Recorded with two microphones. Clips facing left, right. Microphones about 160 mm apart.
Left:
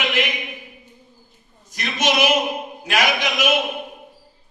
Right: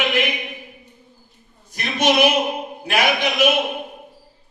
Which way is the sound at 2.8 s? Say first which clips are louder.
Right 2 dB; 55° right (ahead or behind).